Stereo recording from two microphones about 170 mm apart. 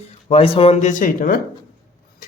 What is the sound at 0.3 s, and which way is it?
Speech, 35° left (ahead or behind).